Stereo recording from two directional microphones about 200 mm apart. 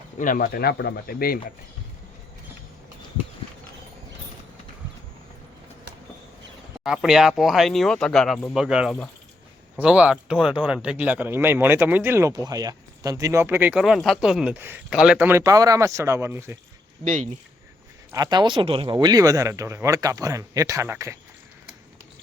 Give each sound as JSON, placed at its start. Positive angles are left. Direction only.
{"t": 0.2, "sound": "speech", "side_deg": 45}
{"t": 6.7, "sound": "speech", "side_deg": 0}
{"t": 17.0, "sound": "speech", "side_deg": -35}
{"t": 18.1, "sound": "speech", "side_deg": -20}